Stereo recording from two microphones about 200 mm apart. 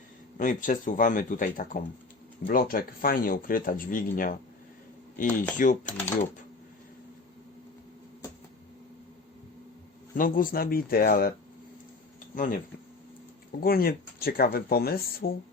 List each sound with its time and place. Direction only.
0.3 s speech: 40° left (ahead or behind)
10.2 s speech: 45° left (ahead or behind)